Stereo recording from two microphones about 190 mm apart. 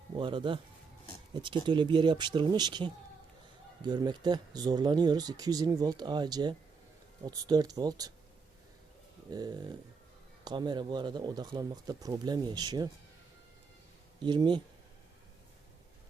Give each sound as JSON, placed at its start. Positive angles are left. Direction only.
{"t": 0.2, "sound": "speech", "side_deg": -25}
{"t": 9.3, "sound": "speech", "side_deg": -20}
{"t": 14.3, "sound": "speech", "side_deg": -25}